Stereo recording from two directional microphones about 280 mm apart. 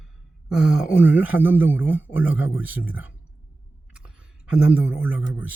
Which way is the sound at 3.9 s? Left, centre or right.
Centre.